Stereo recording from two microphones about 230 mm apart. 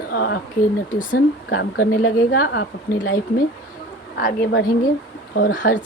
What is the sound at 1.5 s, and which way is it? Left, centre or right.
A woman's voice, left.